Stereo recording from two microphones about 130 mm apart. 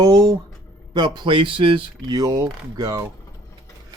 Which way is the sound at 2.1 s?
25° right (ahead or behind).